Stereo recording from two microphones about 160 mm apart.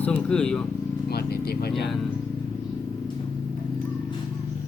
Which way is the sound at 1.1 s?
75° left (ahead or behind).